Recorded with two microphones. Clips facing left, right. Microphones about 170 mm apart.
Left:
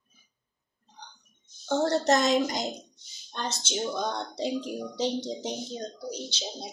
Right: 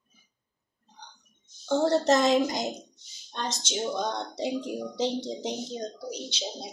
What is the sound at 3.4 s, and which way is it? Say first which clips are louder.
Speech: even; 15° right (ahead or behind).